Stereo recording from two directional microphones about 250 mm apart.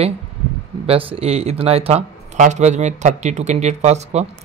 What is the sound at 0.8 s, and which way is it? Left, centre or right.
Speech, right.